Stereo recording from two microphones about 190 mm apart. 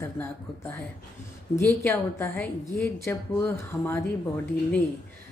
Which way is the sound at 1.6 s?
10° left (ahead or behind).